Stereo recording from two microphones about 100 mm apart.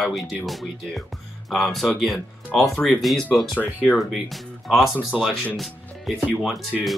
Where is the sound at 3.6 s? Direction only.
15° left (ahead or behind).